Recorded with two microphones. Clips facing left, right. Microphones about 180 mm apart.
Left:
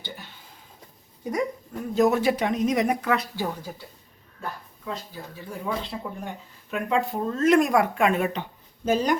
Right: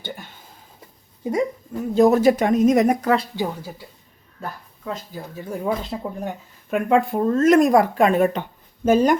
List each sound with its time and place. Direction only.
0.0 s a sound: 50° right (ahead or behind)
1.2 s speech: 25° right (ahead or behind)
2.0 s speech: 35° right (ahead or behind)
3.3 s speech: 10° right (ahead or behind)
5.5 s speech: 40° right (ahead or behind)